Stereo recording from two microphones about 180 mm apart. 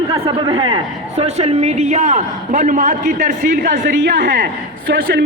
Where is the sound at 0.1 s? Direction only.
25° right (ahead or behind).